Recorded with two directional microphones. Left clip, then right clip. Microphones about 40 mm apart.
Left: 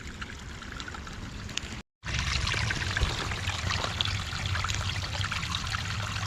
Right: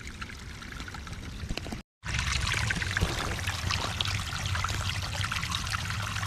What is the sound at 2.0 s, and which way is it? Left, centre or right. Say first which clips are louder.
Pour: even; right.